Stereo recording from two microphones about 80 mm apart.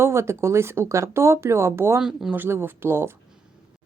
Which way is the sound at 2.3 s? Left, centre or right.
Right.